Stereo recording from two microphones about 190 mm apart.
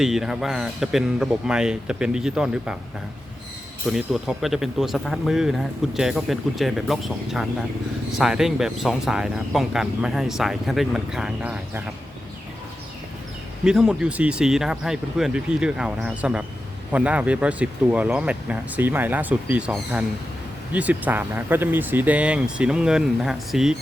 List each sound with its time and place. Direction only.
0.0 s speech: centre (ahead or behind)
3.8 s speech: centre (ahead or behind)
13.7 s speech: 5° right (ahead or behind)